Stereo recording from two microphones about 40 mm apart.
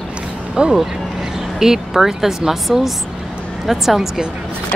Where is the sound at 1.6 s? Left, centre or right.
Centre.